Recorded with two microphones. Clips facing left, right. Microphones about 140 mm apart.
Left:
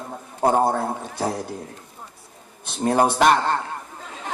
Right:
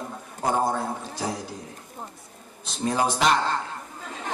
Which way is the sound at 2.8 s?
55° left (ahead or behind).